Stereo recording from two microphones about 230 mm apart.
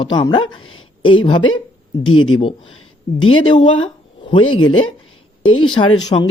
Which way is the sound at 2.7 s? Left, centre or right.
Left.